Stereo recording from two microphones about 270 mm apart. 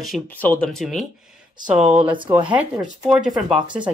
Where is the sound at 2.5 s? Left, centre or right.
Centre.